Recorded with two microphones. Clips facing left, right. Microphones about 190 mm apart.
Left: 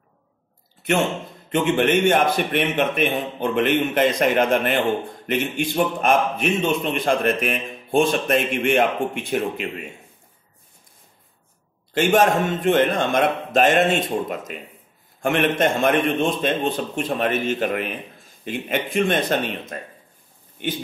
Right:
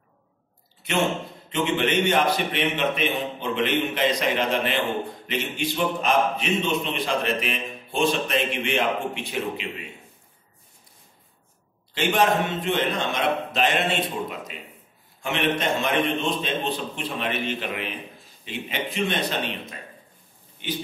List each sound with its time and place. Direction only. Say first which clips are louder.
1.5 s a man's voice: left 5 dB; 50° left (ahead or behind)
11.9 s a man's voice: left 4 dB; 50° left (ahead or behind)